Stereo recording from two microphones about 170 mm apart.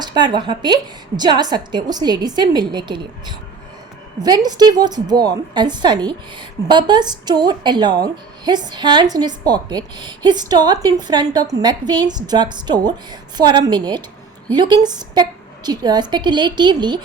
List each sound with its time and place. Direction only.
0.0 s a woman's voice: 25° right (ahead or behind)